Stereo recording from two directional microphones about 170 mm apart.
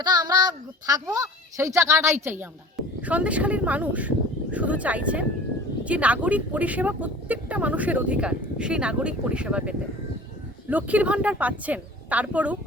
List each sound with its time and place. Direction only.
0.0 s a child's voice: 25° right (ahead or behind); by 12.5 s 10° right (ahead or behind)